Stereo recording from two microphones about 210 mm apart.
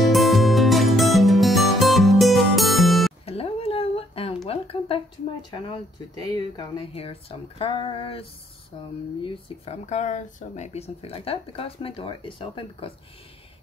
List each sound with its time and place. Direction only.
0.1 s music: centre (ahead or behind)
3.3 s a sound: 30° left (ahead or behind)
5.5 s speech: 20° left (ahead or behind)